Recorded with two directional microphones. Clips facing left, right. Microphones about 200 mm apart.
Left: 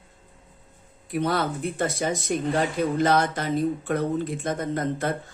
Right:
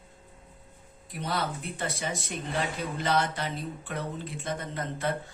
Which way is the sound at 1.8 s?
45° left (ahead or behind).